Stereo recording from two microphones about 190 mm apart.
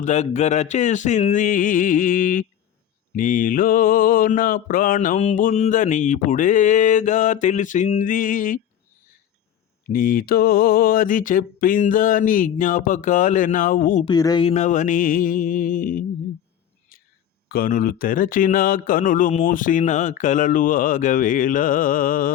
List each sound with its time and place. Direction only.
0.0 s a sound: 40° left (ahead or behind)
3.2 s mantra: 45° left (ahead or behind)
9.9 s mantra: 50° left (ahead or behind)
14.0 s mantra: 20° left (ahead or behind); by 16.0 s 45° left (ahead or behind)
16.9 s a sound: 50° left (ahead or behind)
17.5 s mantra: 50° left (ahead or behind)